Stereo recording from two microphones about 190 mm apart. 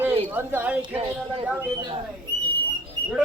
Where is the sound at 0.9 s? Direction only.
30° right (ahead or behind).